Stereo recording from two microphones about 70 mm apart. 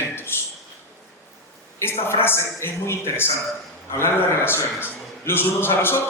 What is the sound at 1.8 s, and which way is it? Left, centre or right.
A man's voice, left.